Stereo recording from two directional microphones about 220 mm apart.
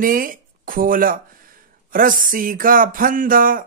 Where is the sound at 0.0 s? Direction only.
40° right (ahead or behind).